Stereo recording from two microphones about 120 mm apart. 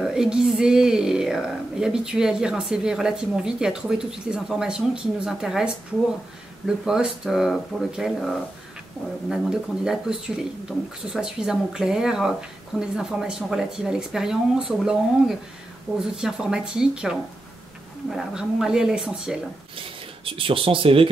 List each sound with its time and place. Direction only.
0.0 s speech: 5° right (ahead or behind)
6.8 s speech: 5° right (ahead or behind)
20.2 s speech: 50° right (ahead or behind)